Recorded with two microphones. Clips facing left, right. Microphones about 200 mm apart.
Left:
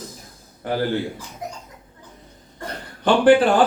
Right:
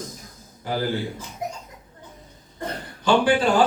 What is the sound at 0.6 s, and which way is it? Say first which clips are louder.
Speech: left 3 dB; 55° left (ahead or behind).